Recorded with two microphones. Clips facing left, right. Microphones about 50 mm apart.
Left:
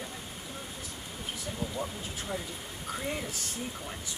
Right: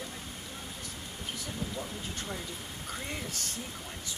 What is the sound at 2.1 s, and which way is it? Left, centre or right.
Speech, centre.